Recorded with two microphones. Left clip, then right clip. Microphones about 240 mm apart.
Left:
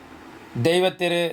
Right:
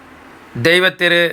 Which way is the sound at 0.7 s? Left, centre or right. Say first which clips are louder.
Right 9 dB; right.